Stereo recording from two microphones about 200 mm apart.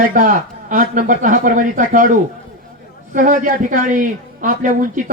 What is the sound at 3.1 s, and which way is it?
A woman's voice, 40° right (ahead or behind).